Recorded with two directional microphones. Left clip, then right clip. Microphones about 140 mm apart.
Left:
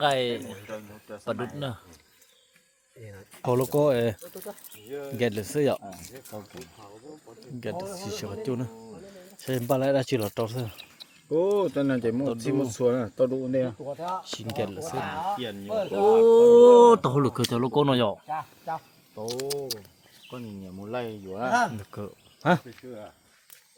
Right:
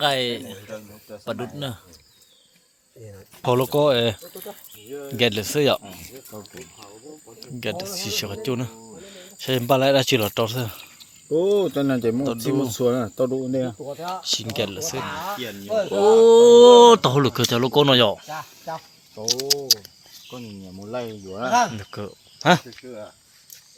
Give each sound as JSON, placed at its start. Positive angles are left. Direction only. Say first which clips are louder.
{"t": 0.0, "sound": "a man's voice", "louder": "right 3 dB", "side_deg": -10}
{"t": 3.4, "sound": "speech", "louder": "right 5 dB", "side_deg": -10}
{"t": 3.7, "sound": "speech", "louder": "right 3 dB", "side_deg": 5}
{"t": 4.9, "sound": "speech", "louder": "right 2 dB", "side_deg": -50}
{"t": 5.1, "sound": "speech", "louder": "right 7 dB", "side_deg": -10}
{"t": 11.3, "sound": "speech", "louder": "right 4 dB", "side_deg": -60}
{"t": 14.2, "sound": "speech", "louder": "right 7 dB", "side_deg": -15}
{"t": 15.6, "sound": "speech", "louder": "right 6 dB", "side_deg": -70}
{"t": 16.0, "sound": "speech", "louder": "right 5 dB", "side_deg": -20}
{"t": 18.3, "sound": "a sound", "louder": "even", "side_deg": -55}
{"t": 19.2, "sound": "speech", "louder": "right 8 dB", "side_deg": 0}
{"t": 20.3, "sound": "speech", "louder": "right 2 dB", "side_deg": -20}
{"t": 21.2, "sound": "speech", "louder": "right 3 dB", "side_deg": -45}
{"t": 21.8, "sound": "speech", "louder": "right 5 dB", "side_deg": 0}